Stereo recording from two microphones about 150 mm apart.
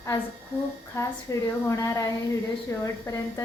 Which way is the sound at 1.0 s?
20° left (ahead or behind).